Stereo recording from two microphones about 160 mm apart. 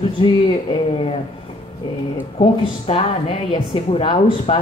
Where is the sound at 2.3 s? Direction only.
40° left (ahead or behind).